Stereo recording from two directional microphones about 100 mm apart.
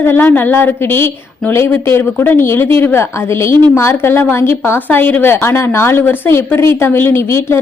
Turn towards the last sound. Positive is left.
turn(degrees=25)  # may be behind; listen again after turning